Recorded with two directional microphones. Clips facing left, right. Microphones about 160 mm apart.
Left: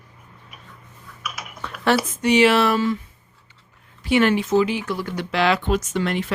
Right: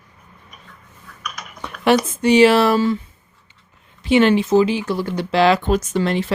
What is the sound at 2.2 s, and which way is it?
Speech, 35° right (ahead or behind).